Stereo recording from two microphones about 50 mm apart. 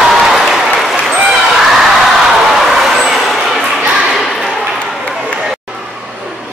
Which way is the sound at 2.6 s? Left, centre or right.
Centre.